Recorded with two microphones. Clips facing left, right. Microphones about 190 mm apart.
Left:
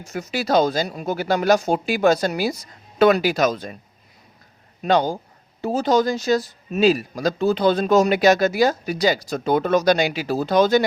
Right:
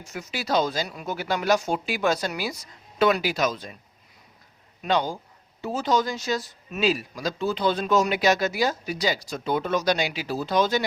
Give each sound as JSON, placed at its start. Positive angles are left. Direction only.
{"t": 0.1, "sound": "speech", "side_deg": 45}
{"t": 4.8, "sound": "speech", "side_deg": 40}